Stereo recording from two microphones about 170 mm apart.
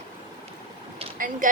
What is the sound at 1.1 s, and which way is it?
Speech, 50° right (ahead or behind).